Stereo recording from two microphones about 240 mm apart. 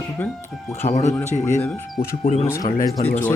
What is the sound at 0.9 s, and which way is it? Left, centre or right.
Speech, left.